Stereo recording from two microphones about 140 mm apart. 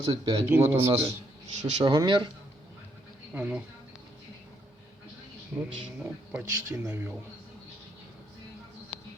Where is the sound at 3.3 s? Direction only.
10° right (ahead or behind).